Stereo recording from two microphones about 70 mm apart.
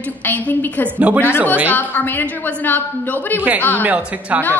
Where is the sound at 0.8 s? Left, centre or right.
Right.